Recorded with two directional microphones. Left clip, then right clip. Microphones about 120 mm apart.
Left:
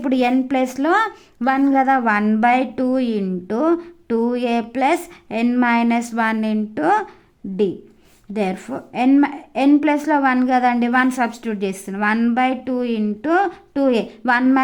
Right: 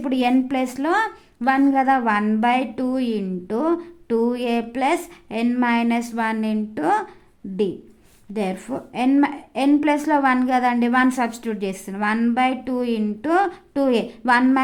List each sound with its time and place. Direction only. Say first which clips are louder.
0.0 s a woman's voice: left 2 dB; 30° left (ahead or behind)
8.3 s a woman's voice: left 3 dB; 25° left (ahead or behind)